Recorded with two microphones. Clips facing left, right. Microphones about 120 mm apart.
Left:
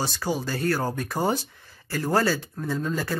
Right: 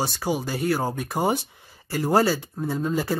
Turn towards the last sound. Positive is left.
turn(degrees=-20)  # may be behind; listen again after turning